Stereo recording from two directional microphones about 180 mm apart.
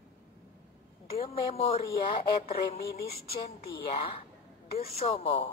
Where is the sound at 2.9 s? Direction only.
60° left (ahead or behind).